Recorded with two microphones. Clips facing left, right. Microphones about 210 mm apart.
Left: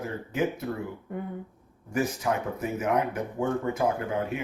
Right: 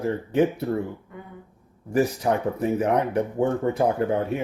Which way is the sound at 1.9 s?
35° right (ahead or behind).